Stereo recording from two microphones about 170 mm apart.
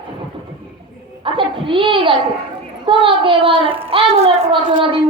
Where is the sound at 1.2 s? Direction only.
30° right (ahead or behind).